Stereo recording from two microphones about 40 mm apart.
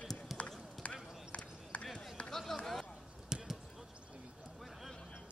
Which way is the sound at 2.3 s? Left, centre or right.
Centre.